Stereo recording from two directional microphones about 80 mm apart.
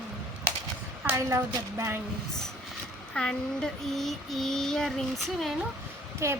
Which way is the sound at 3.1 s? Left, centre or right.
Centre.